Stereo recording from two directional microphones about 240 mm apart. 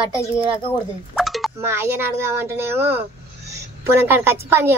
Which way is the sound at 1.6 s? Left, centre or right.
Centre.